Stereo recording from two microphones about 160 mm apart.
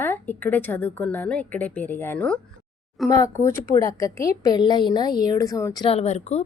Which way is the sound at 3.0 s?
20° left (ahead or behind).